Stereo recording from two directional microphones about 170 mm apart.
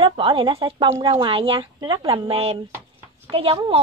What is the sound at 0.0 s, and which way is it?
A woman's voice, 30° right (ahead or behind).